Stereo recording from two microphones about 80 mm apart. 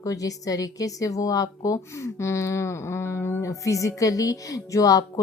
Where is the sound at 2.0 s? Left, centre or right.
Left.